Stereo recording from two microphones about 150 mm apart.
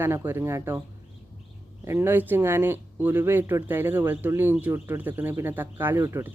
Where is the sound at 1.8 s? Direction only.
15° right (ahead or behind).